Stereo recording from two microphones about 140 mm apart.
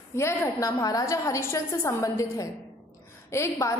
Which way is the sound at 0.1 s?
20° left (ahead or behind).